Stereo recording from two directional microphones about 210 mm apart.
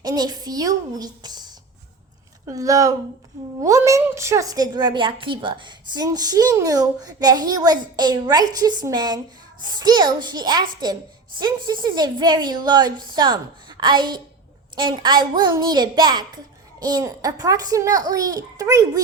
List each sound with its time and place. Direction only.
0.0 s a woman's voice: 20° right (ahead or behind)
2.5 s a child's voice: 15° right (ahead or behind)